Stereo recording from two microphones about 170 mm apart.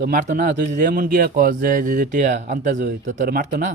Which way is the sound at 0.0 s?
50° right (ahead or behind).